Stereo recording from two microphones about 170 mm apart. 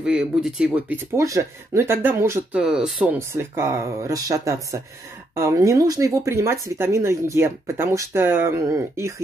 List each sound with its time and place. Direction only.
0.0 s speech: 5° right (ahead or behind)
2.6 s speech: 5° right (ahead or behind)
3.2 s speech: 15° right (ahead or behind)